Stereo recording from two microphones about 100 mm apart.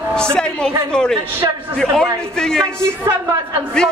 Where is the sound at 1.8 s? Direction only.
5° left (ahead or behind).